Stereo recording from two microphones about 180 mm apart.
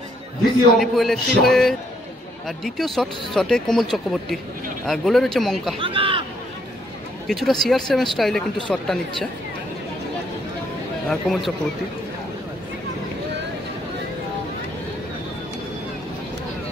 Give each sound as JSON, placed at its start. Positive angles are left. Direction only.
{"t": 0.7, "sound": "speech", "side_deg": 0}
{"t": 5.8, "sound": "a sound", "side_deg": -30}
{"t": 7.2, "sound": "speech", "side_deg": 0}
{"t": 11.1, "sound": "speech", "side_deg": 0}